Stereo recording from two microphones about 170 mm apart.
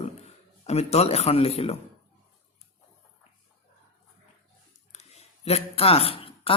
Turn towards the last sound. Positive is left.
turn(degrees=35)  # may be behind; listen again after turning